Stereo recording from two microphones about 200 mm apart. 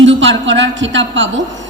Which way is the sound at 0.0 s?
70° right (ahead or behind).